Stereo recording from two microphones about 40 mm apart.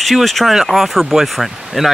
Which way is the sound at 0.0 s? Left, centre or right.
Centre.